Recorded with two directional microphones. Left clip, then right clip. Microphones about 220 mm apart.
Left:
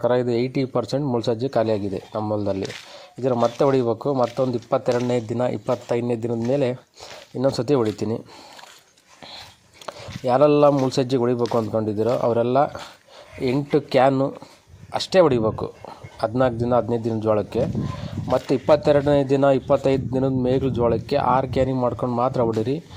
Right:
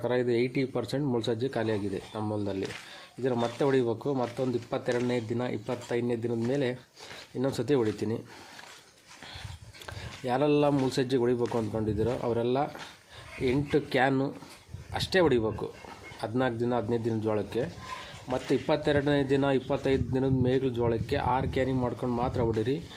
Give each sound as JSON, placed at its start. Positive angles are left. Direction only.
{"t": 0.0, "sound": "speech", "side_deg": 30}
{"t": 9.8, "sound": "speech", "side_deg": 30}